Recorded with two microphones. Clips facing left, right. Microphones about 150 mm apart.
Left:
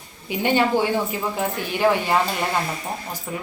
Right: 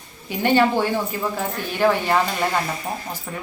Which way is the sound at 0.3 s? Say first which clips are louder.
Right 2 dB; 15° left (ahead or behind).